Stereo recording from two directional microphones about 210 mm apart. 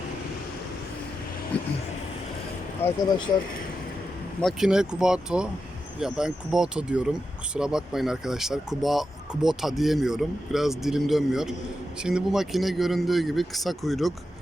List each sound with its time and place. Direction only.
1.5 s speech: 5° left (ahead or behind)
2.8 s speech: 20° left (ahead or behind)
4.4 s speech: centre (ahead or behind)